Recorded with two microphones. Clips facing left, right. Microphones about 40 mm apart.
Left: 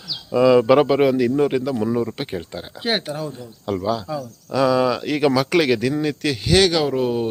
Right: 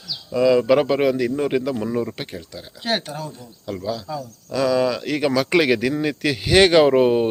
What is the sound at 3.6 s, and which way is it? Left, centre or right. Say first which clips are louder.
Speech: left 5 dB; left.